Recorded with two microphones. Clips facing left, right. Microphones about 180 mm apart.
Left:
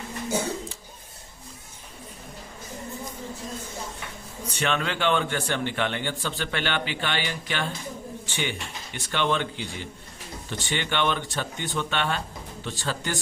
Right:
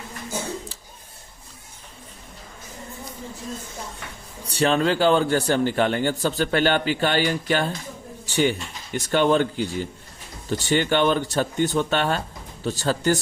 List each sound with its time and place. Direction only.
4.4 s a man's voice: 35° right (ahead or behind)